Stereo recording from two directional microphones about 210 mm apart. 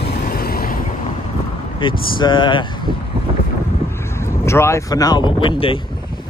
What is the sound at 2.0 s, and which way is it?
Speech, 25° left (ahead or behind).